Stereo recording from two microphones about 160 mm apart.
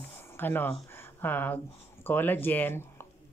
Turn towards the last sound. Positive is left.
turn(degrees=15)  # may be behind; listen again after turning